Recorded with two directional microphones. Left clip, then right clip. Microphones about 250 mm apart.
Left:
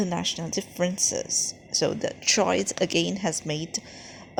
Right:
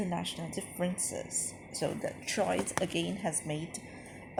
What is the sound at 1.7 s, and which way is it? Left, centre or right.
A woman's voice, left.